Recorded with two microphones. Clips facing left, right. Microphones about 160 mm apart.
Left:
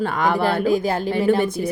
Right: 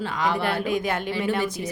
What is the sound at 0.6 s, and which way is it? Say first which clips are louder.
Speech: left 6 dB; 35° left (ahead or behind).